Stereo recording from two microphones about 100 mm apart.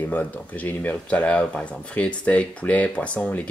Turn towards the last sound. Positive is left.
turn(degrees=15)  # may be behind; listen again after turning